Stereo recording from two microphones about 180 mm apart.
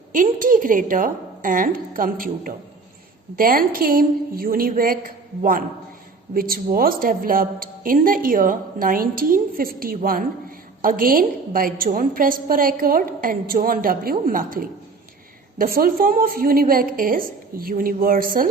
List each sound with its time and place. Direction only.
0.1 s a woman's voice: 50° right (ahead or behind)